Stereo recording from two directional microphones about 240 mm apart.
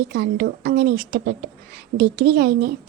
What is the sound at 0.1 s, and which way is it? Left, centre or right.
Speech, right.